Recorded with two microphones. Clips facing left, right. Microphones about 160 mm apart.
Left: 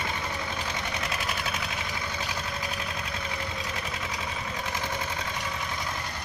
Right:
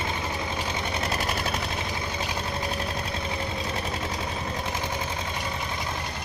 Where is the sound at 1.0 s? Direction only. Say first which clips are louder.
Right 4 dB; 40° right (ahead or behind).